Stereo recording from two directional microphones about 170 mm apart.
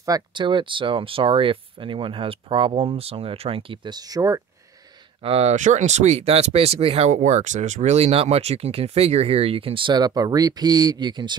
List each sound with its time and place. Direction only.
0.0 s speech: 25° right (ahead or behind)
5.2 s speech: 35° right (ahead or behind)